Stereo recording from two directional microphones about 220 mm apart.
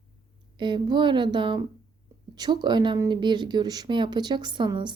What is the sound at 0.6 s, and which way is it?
A woman's voice, 20° right (ahead or behind).